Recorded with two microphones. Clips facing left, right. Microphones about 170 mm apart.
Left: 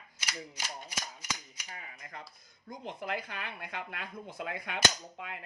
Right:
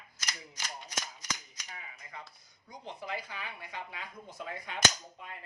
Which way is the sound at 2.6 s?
50° left (ahead or behind).